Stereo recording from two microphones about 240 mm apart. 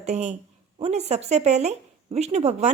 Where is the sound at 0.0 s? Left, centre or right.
Right.